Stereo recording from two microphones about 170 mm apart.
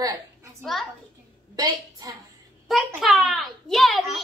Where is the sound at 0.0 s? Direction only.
20° right (ahead or behind).